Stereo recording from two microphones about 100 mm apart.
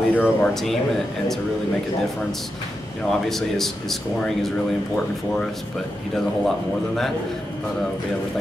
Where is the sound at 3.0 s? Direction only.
5° left (ahead or behind).